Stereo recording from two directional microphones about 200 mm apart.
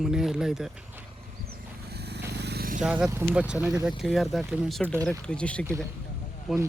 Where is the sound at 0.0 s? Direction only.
Centre (ahead or behind).